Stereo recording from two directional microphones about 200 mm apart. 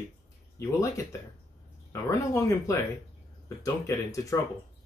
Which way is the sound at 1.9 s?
15° left (ahead or behind).